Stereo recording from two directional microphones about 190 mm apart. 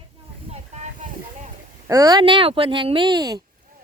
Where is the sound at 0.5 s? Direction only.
35° right (ahead or behind).